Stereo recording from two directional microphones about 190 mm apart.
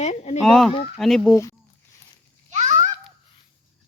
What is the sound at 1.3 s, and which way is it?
Speech, 15° left (ahead or behind).